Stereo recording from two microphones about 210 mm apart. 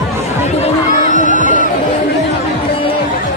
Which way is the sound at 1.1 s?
35° left (ahead or behind).